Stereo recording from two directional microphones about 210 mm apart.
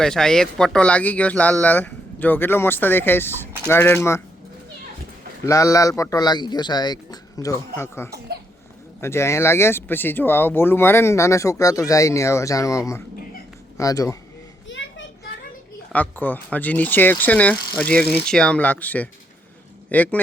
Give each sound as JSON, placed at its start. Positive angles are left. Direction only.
{"t": 0.0, "sound": "speech", "side_deg": 5}
{"t": 5.5, "sound": "speech", "side_deg": 15}
{"t": 14.7, "sound": "a sound", "side_deg": 60}
{"t": 15.9, "sound": "speech", "side_deg": 10}